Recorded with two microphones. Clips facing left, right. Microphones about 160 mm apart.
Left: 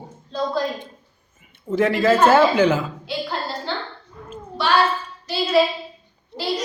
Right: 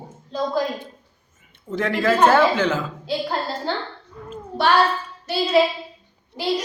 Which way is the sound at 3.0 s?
45° right (ahead or behind).